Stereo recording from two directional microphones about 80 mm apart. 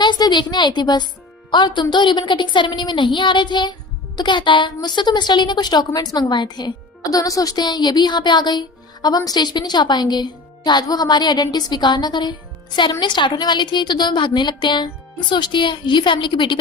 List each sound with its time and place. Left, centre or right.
0.0 s a woman's voice: left